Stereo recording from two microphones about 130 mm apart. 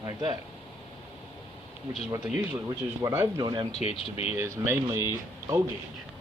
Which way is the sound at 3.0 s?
20° right (ahead or behind).